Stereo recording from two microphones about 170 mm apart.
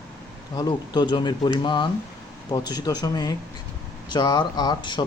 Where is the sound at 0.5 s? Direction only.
25° left (ahead or behind).